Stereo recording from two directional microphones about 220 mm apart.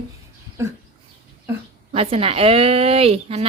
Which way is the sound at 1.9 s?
25° right (ahead or behind).